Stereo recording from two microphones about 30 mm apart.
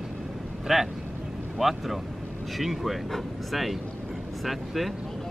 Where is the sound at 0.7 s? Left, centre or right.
Centre.